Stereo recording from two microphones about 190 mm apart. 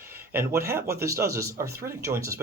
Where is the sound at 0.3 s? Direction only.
15° right (ahead or behind).